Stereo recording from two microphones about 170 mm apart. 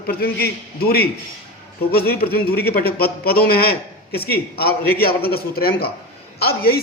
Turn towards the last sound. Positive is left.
turn(degrees=65)  # may be behind; listen again after turning